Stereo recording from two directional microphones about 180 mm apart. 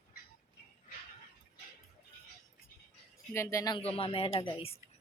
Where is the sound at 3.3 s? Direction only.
15° left (ahead or behind).